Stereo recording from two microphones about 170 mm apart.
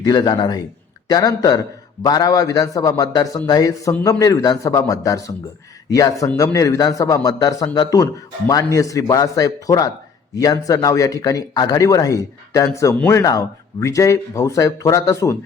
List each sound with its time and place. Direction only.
0.0 s a man's voice: 25° left (ahead or behind)
12.9 s speech: 5° left (ahead or behind)
13.1 s a man's voice: 20° left (ahead or behind)